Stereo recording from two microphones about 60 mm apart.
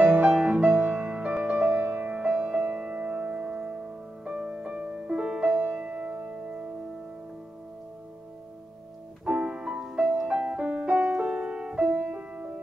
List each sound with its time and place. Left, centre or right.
0.0 s music: right
9.2 s music: centre